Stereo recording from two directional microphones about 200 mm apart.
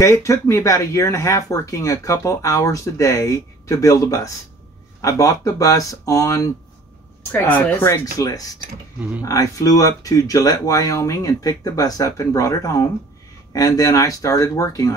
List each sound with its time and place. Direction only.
0.0 s speech: 15° left (ahead or behind)